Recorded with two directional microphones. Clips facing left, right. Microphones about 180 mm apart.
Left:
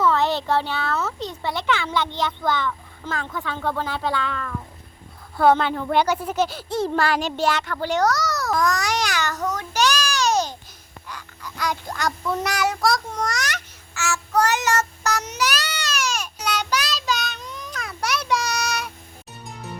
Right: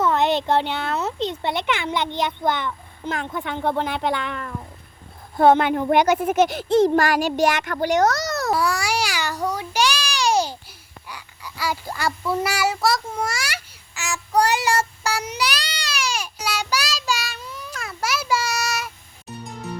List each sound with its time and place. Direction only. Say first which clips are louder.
0.0 s a child's voice: right 1 dB; 20° right (ahead or behind)
8.5 s speech: left 3 dB; 10° right (ahead or behind)
11.1 s child singing: left 1 dB; 10° right (ahead or behind)